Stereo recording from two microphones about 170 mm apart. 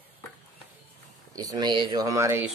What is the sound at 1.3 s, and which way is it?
Speech, 25° right (ahead or behind).